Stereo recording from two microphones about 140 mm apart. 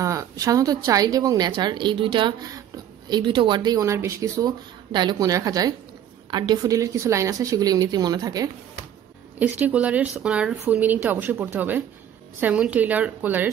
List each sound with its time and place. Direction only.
0.0 s a woman's voice: 25° right (ahead or behind)
9.4 s a woman's voice: 10° right (ahead or behind)